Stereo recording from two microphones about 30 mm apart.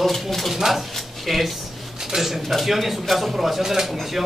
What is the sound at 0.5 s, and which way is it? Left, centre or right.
Speech, centre.